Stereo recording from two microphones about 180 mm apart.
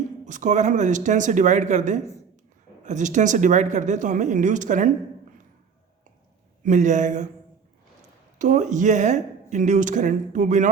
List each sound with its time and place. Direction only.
0.3 s speech: 45° right (ahead or behind)
6.6 s speech: 45° right (ahead or behind)
8.4 s speech: 45° right (ahead or behind)